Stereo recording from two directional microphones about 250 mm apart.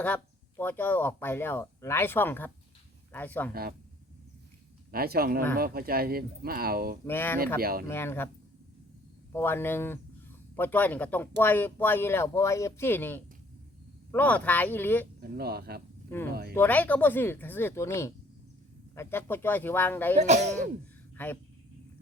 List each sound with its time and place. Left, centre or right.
0.0 s speech: centre
3.5 s speech: right
4.9 s speech: right
7.0 s speech: centre
7.6 s speech: right
7.9 s speech: centre
9.3 s speech: centre
15.2 s speech: right
16.6 s speech: centre
20.1 s speech: right
21.2 s speech: centre